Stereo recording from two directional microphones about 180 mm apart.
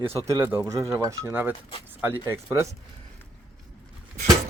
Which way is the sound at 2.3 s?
15° right (ahead or behind).